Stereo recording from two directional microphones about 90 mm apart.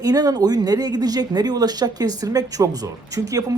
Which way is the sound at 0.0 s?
45° right (ahead or behind).